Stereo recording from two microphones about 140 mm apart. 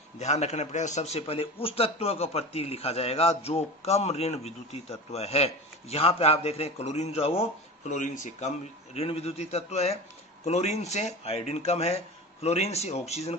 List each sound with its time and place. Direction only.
0.2 s a man's voice: 55° left (ahead or behind)
7.9 s speech: 65° left (ahead or behind)
9.0 s a man's voice: 45° left (ahead or behind)